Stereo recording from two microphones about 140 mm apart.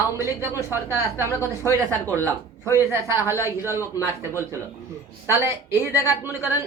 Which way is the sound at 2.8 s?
20° right (ahead or behind).